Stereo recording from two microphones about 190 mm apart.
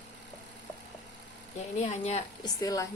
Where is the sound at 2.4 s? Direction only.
20° left (ahead or behind).